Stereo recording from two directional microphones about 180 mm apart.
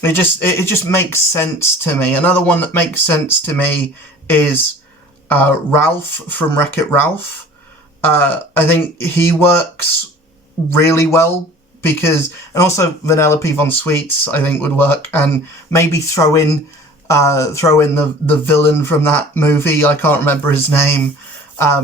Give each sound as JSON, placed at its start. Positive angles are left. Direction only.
{"t": 0.0, "sound": "speech", "side_deg": 10}
{"t": 10.8, "sound": "speech", "side_deg": 15}